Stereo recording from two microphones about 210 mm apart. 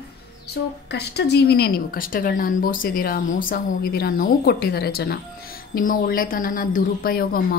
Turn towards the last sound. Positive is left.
turn(degrees=45)  # may be behind; listen again after turning